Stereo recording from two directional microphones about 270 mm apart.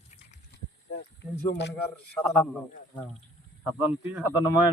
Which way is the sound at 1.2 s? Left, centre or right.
Left.